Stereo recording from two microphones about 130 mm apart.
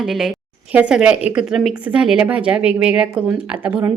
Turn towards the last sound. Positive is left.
turn(degrees=-10)  # may be behind; listen again after turning